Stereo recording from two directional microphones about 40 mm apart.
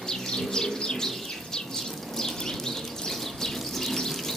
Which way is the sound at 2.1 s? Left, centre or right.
Centre.